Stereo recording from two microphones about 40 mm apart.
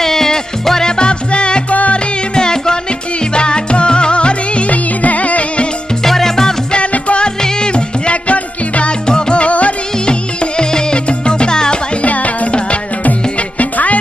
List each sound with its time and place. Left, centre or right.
0.0 s music: centre; by 5.6 s left
6.1 s music: centre
6.7 s music: left
10.1 s music: left
12.0 s music: left
13.6 s music: left